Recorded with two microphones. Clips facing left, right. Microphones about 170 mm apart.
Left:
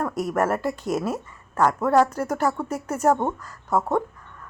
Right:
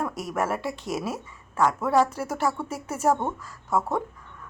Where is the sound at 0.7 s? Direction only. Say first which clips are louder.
Left 5 dB; 50° left (ahead or behind).